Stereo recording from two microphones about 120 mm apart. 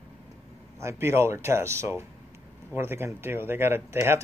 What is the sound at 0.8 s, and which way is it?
Speech, 20° right (ahead or behind).